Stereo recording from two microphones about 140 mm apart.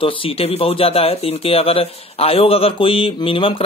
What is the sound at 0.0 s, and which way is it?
Speech, 40° left (ahead or behind).